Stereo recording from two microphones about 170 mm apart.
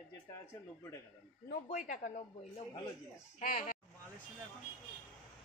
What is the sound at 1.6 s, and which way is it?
A woman's voice, 50° left (ahead or behind).